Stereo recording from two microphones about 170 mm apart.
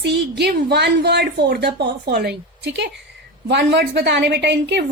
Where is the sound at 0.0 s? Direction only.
75° right (ahead or behind).